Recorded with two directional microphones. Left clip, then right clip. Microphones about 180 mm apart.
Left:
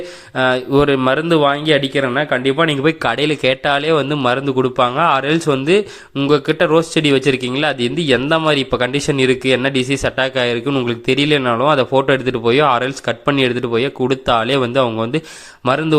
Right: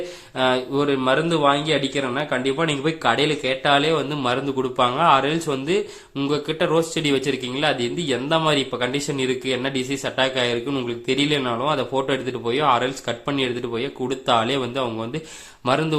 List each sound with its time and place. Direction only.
0.3 s a man's voice: 30° left (ahead or behind)